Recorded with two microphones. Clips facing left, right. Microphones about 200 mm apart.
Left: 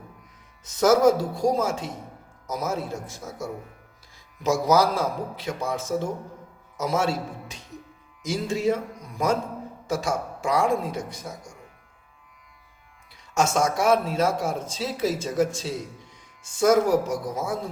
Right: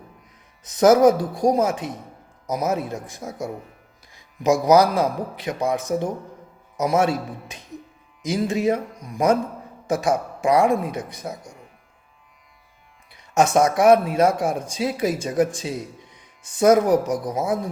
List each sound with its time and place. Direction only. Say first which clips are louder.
0.6 s a man's voice: right 4 dB; 20° right (ahead or behind)
13.1 s speech: right 5 dB; 15° right (ahead or behind)